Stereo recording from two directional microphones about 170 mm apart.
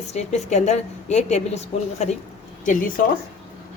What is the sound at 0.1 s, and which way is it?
A woman's voice, 40° left (ahead or behind).